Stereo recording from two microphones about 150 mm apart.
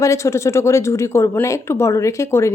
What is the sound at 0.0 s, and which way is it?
Speech, 20° left (ahead or behind).